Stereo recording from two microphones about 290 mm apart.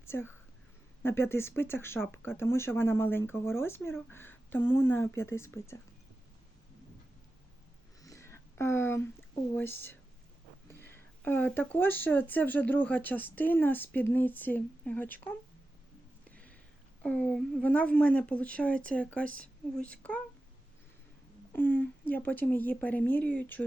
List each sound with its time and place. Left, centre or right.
0.0 s speech: centre
8.0 s a sound: centre
9.6 s speech: centre
16.3 s a sound: centre
17.0 s speech: centre
21.5 s a woman's voice: centre